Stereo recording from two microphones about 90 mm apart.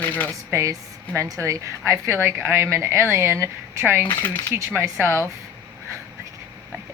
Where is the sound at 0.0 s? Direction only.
20° left (ahead or behind).